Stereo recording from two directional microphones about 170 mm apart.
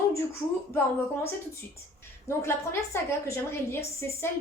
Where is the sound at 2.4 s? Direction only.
15° left (ahead or behind).